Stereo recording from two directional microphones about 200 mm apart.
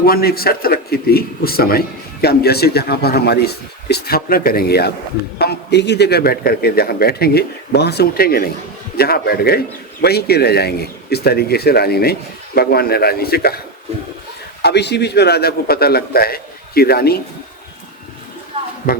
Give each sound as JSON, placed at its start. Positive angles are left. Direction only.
{"t": 0.0, "sound": "speech", "side_deg": 50}
{"t": 13.9, "sound": "a sound", "side_deg": -30}
{"t": 14.6, "sound": "speech", "side_deg": 55}
{"t": 18.8, "sound": "speech", "side_deg": 50}